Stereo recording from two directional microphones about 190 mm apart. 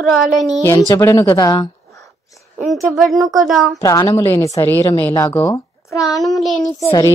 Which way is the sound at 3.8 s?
15° left (ahead or behind).